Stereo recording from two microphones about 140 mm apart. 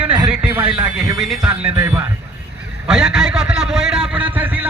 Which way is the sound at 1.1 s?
Centre (ahead or behind).